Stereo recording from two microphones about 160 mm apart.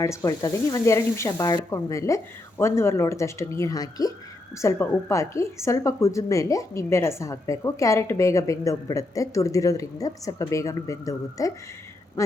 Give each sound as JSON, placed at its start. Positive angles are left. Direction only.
{"t": 0.0, "sound": "a woman's voice", "side_deg": 20}